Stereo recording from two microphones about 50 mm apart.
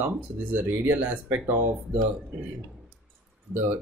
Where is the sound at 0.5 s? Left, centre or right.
Right.